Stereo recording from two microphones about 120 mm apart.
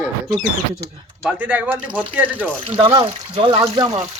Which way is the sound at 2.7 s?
45° right (ahead or behind).